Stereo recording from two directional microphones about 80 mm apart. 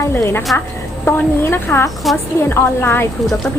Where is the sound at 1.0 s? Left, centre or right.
Left.